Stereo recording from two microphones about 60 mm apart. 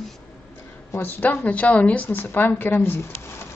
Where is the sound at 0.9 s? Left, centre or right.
Left.